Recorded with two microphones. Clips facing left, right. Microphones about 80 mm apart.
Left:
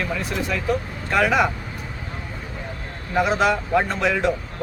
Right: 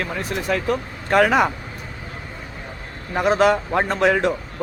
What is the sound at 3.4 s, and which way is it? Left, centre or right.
Speech, right.